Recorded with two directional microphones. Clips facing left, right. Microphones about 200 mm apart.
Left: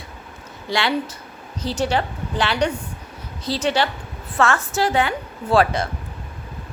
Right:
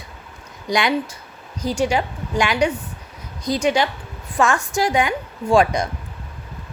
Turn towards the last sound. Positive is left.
turn(degrees=-15)  # may be behind; listen again after turning